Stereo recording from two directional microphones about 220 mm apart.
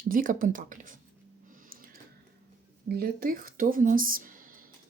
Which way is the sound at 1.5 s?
40° right (ahead or behind).